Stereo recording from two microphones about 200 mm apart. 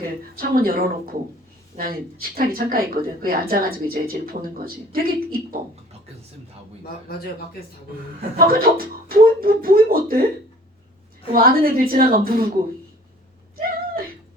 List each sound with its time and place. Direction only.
0.0 s speech: 50° right (ahead or behind)
8.4 s speech: 45° right (ahead or behind)
11.3 s speech: 45° right (ahead or behind)